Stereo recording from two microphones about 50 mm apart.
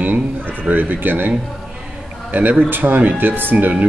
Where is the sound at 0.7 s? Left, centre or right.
Right.